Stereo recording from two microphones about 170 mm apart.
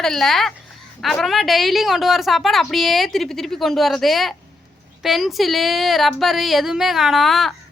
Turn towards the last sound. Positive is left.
turn(degrees=0)  # may be behind; listen again after turning